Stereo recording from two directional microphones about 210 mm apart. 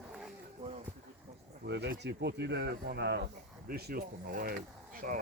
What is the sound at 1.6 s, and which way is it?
Speech, 55° right (ahead or behind).